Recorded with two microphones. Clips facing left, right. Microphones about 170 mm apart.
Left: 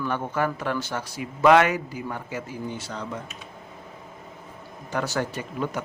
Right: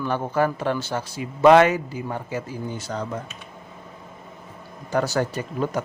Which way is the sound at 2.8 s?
45° right (ahead or behind).